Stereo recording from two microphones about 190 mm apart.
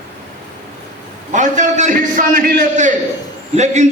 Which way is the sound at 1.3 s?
40° right (ahead or behind).